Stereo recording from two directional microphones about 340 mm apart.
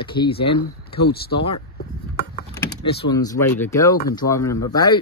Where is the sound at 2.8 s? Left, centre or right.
Centre.